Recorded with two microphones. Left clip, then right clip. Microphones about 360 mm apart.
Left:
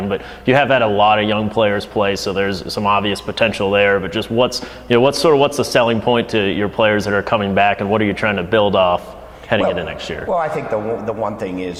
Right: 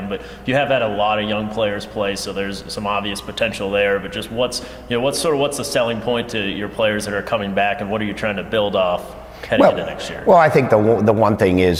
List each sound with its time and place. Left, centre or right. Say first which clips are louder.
0.1 s a man's voice: left 5 dB; left
10.2 s speech: right 8 dB; right